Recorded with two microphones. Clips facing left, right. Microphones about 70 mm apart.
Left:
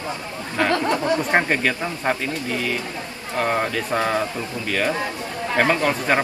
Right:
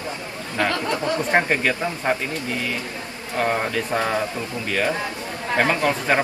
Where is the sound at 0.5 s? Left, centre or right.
Left.